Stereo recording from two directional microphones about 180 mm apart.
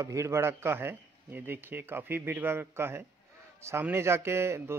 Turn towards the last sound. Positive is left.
turn(degrees=-15)  # may be behind; listen again after turning